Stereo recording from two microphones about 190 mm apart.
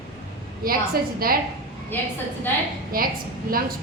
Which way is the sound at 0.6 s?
50° right (ahead or behind).